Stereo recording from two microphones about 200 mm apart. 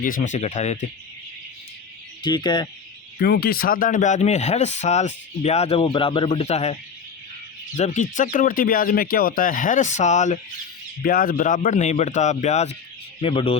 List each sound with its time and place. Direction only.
0.0 s speech: 40° left (ahead or behind)
2.2 s speech: 20° left (ahead or behind)
3.2 s speech: 50° left (ahead or behind); by 6.7 s 35° left (ahead or behind)
7.8 s speech: 35° left (ahead or behind)